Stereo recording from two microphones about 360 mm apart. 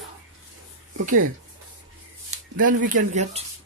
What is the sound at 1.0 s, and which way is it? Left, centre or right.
Speech, right.